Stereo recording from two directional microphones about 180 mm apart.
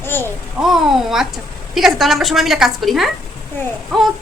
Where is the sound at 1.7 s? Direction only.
Centre (ahead or behind).